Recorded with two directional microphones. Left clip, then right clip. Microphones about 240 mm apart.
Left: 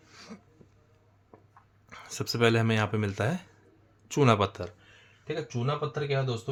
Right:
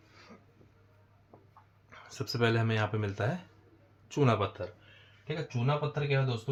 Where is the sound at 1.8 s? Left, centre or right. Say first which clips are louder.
Left 5 dB; left.